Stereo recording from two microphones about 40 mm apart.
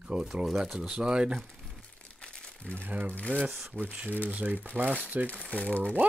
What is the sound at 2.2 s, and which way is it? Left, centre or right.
Crumpling, left.